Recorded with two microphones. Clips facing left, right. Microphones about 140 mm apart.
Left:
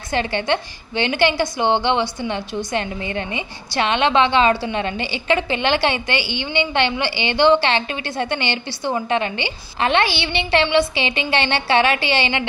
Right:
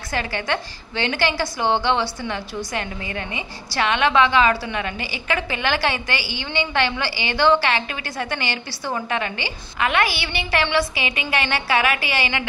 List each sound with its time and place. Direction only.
0.1 s a woman's voice: 25° left (ahead or behind)